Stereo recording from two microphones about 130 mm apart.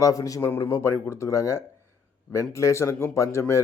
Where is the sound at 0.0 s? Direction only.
25° left (ahead or behind).